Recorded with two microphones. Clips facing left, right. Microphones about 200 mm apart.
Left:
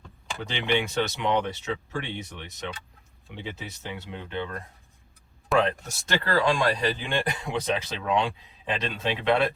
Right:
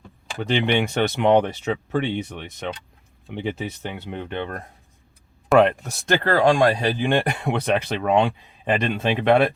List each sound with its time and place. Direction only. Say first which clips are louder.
0.4 s speech: right 6 dB; 60° right (ahead or behind)